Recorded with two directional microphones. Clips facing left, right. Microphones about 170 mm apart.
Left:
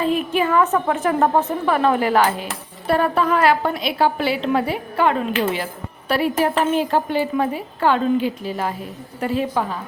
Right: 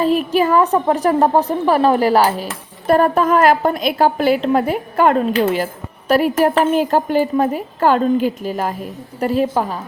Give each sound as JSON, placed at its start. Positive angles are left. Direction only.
{"t": 0.0, "sound": "a woman's voice", "side_deg": -40}